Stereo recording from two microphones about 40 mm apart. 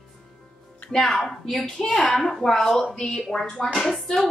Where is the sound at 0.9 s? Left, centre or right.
Centre.